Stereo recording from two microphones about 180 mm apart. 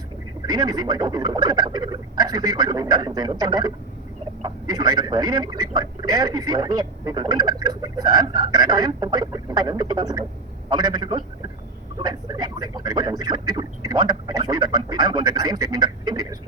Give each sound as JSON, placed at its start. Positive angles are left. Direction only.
{"t": 0.4, "sound": "a man's voice", "side_deg": -25}